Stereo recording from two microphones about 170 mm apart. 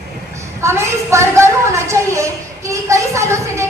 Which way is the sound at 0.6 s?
15° right (ahead or behind).